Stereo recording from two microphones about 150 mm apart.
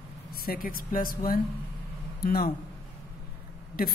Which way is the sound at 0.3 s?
80° left.